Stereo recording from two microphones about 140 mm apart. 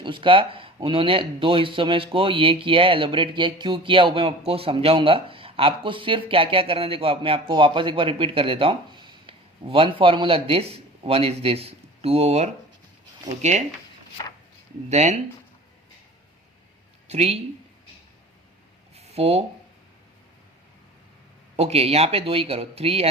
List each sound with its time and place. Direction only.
0.0 s speech: 35° right (ahead or behind)
14.8 s speech: 55° right (ahead or behind)
17.1 s speech: 45° right (ahead or behind)
18.9 s a sound: 50° right (ahead or behind)
21.5 s speech: 45° right (ahead or behind)